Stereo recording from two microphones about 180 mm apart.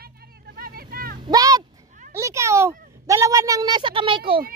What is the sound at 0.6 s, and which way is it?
Vehicle, 55° right (ahead or behind).